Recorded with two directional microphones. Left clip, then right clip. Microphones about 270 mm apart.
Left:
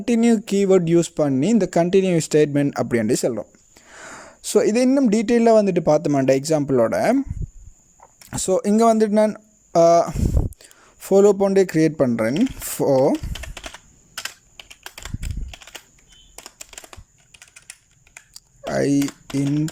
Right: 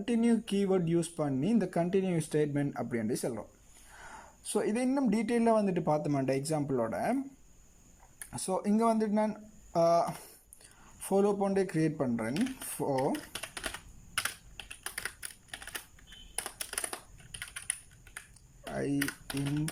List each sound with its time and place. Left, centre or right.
0.0 s speech: left
8.3 s speech: left
15.4 s typewriter: centre
16.7 s typing: centre
18.3 s typing: left